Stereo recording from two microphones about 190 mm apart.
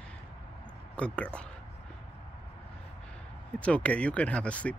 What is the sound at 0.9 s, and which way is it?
Speech, 5° left (ahead or behind).